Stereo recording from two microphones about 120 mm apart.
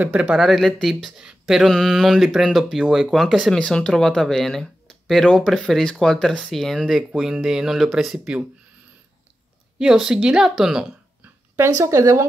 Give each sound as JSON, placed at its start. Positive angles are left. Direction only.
{"t": 0.0, "sound": "speech", "side_deg": -10}
{"t": 9.8, "sound": "speech", "side_deg": -5}
{"t": 11.5, "sound": "speech", "side_deg": -25}